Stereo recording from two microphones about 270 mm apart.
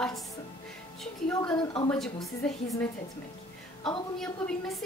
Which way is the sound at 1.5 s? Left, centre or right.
Centre.